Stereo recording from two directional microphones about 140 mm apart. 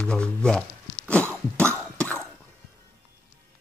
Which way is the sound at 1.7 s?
20° right (ahead or behind).